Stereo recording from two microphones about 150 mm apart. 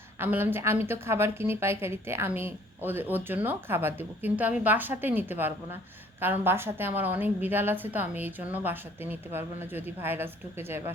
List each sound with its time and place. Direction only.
0.2 s a woman's voice: 15° right (ahead or behind)